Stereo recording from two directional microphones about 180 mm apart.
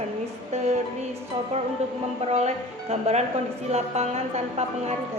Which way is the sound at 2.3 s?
35° right (ahead or behind).